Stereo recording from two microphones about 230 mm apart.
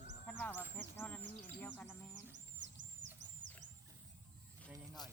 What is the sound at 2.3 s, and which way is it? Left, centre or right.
Music, right.